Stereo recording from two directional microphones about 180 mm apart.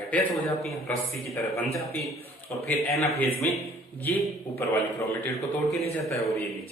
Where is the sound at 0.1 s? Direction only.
10° left (ahead or behind).